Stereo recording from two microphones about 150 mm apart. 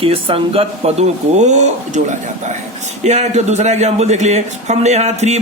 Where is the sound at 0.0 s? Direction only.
40° right (ahead or behind).